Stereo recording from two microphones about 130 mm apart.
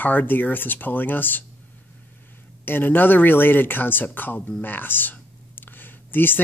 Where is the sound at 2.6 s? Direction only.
15° left (ahead or behind).